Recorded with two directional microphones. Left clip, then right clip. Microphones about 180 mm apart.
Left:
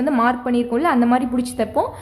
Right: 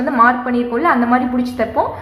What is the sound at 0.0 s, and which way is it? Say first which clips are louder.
A woman's voice: right 6 dB; 40° left (ahead or behind).